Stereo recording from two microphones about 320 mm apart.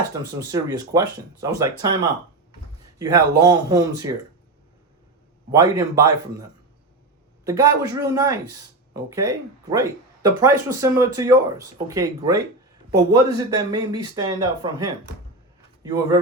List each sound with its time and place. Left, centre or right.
0.2 s speech: centre
3.0 s speech: centre
5.5 s speech: centre